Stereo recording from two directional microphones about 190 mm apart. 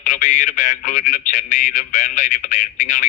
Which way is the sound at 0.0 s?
40° left (ahead or behind).